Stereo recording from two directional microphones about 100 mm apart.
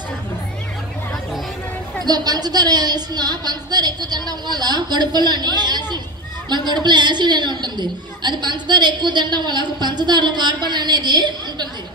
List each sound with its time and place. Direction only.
2.0 s a woman's voice: 40° right (ahead or behind)